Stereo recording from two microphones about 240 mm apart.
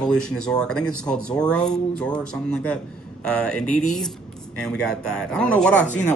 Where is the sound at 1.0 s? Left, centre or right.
Centre.